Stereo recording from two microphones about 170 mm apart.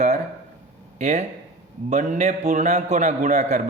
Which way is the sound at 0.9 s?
45° right (ahead or behind).